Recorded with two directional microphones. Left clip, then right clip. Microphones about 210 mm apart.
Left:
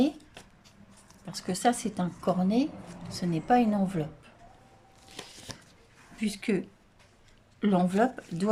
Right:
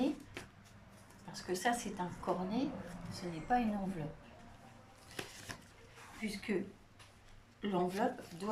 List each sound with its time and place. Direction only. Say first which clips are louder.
1.3 s a woman's voice: left 8 dB; 50° left (ahead or behind)
5.5 s a sound: left 4 dB; 25° left (ahead or behind)
6.2 s a woman's voice: left 8 dB; 50° left (ahead or behind)
7.6 s a woman's voice: left 9 dB; 50° left (ahead or behind)